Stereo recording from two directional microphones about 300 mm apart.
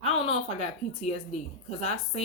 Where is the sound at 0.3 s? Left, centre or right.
Left.